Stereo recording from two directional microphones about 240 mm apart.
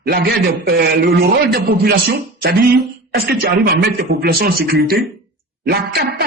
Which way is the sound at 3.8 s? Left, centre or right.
Right.